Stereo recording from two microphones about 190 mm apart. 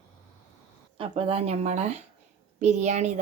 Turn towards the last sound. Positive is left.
turn(degrees=-35)  # may be behind; listen again after turning